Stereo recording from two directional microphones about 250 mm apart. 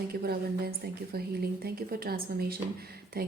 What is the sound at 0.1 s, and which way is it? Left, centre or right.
Speech, right.